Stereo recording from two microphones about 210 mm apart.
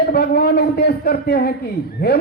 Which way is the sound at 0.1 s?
50° left (ahead or behind).